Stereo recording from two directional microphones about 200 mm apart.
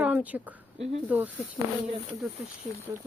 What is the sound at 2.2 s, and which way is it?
Speech, 5° right (ahead or behind).